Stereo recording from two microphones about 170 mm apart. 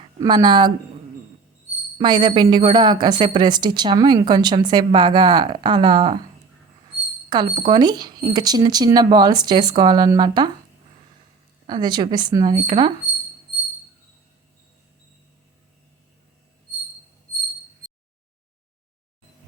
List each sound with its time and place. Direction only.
0.2 s a woman's voice: 25° right (ahead or behind)
2.0 s a woman's voice: 25° right (ahead or behind)
7.3 s a woman's voice: 30° right (ahead or behind)
11.7 s a woman's voice: 25° right (ahead or behind)